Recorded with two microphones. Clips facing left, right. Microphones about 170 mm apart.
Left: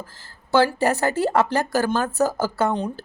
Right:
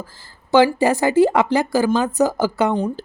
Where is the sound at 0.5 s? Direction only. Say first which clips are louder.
Right 4 dB; 15° right (ahead or behind).